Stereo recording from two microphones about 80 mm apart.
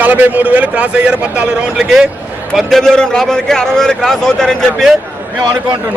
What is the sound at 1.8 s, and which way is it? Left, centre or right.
A man's voice, centre.